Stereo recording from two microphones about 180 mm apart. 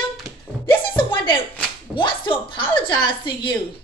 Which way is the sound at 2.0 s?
25° left (ahead or behind).